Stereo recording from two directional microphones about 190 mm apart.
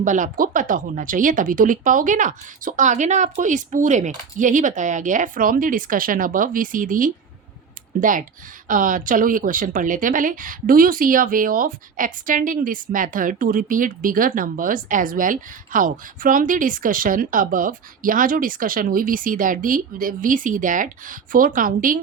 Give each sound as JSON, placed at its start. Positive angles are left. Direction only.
{"t": 0.0, "sound": "speech", "side_deg": -40}